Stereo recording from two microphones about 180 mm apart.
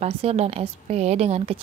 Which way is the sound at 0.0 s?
35° right (ahead or behind).